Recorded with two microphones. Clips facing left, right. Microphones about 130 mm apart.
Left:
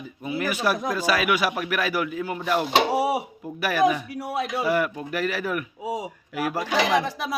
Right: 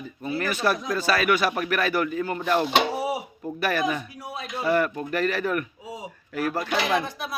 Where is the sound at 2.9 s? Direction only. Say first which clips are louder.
Left 5 dB; 70° left (ahead or behind).